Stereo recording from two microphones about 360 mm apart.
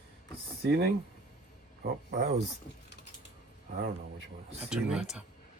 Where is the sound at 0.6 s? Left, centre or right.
Right.